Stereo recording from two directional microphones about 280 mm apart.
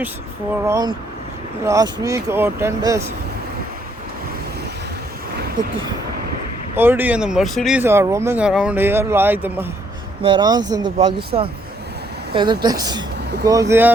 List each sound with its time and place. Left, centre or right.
0.5 s speech: centre
6.7 s speech: centre